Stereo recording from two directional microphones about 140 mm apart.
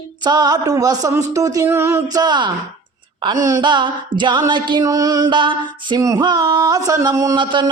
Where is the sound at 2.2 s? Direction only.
35° right (ahead or behind).